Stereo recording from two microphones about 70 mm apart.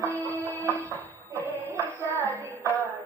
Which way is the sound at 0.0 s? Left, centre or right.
Right.